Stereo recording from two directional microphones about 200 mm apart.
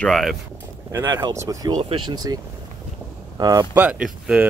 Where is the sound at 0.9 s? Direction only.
15° right (ahead or behind).